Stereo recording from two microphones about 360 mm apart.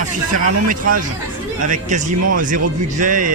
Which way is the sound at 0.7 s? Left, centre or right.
Right.